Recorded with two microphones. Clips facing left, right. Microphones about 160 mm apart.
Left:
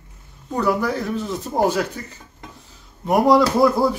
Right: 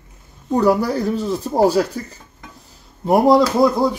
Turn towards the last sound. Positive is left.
turn(degrees=-15)  # may be behind; listen again after turning